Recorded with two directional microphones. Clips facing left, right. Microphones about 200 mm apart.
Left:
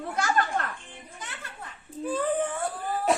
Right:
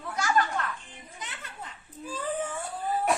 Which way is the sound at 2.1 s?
55° left (ahead or behind).